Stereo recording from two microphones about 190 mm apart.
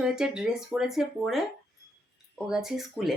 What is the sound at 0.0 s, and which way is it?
Speech, 5° right (ahead or behind).